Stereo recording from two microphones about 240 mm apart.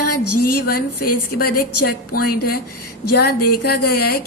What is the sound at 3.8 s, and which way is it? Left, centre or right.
Speech, left.